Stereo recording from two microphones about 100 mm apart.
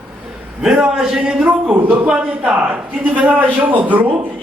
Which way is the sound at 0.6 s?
5° right (ahead or behind).